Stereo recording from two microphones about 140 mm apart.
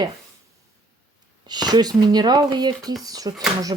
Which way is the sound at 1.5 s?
30° right (ahead or behind).